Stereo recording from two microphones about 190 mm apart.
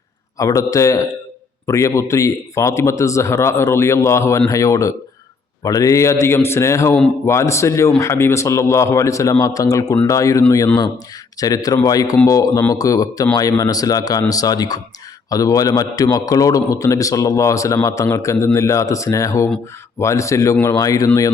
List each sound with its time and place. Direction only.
0.3 s a man's voice: 15° left (ahead or behind)